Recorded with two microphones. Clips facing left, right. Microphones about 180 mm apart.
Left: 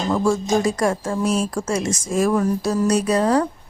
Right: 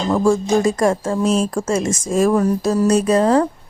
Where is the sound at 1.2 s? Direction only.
30° right (ahead or behind).